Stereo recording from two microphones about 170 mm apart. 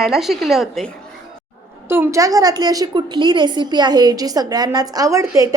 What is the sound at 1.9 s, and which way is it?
A woman's voice, 15° right (ahead or behind).